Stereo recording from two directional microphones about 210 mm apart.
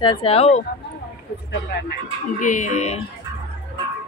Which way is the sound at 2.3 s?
35° left (ahead or behind).